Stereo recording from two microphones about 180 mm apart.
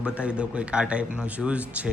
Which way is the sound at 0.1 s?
5° right (ahead or behind).